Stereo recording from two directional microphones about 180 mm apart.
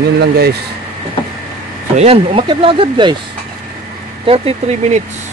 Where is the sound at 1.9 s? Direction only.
35° right (ahead or behind).